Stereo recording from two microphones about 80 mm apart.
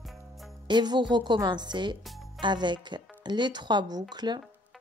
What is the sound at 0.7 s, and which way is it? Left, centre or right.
A woman's voice, right.